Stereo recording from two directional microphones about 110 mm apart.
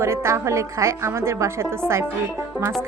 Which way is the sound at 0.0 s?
25° right (ahead or behind).